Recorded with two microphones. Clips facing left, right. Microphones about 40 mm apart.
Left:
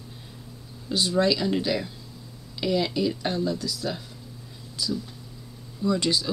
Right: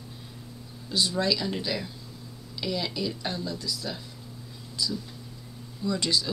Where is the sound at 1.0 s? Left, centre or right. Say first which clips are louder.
Left 4 dB; left.